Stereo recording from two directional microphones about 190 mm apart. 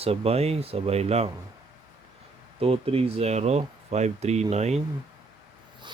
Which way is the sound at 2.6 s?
30° right (ahead or behind).